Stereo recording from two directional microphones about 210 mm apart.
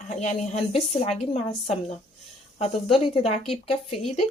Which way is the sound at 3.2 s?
25° left (ahead or behind).